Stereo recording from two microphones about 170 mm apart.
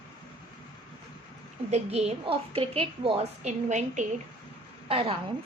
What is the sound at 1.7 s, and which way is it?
A woman's voice, 40° right (ahead or behind).